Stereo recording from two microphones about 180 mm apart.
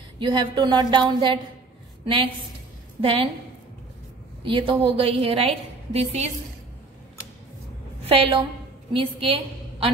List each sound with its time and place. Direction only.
0.2 s a woman's voice: 25° right (ahead or behind)
3.0 s a woman's voice: 30° right (ahead or behind)
4.5 s a woman's voice: 30° right (ahead or behind)
8.0 s a woman's voice: 30° right (ahead or behind)